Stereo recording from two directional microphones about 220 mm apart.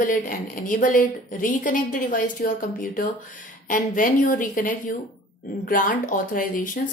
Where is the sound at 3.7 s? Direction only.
35° left (ahead or behind).